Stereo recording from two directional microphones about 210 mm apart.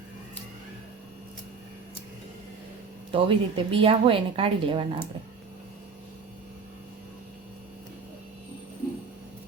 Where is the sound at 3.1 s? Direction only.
25° right (ahead or behind).